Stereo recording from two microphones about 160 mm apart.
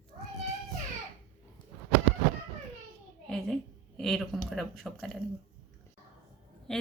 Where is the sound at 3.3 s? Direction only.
5° left (ahead or behind).